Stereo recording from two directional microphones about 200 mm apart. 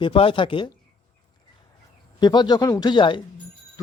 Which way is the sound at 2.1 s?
20° left (ahead or behind).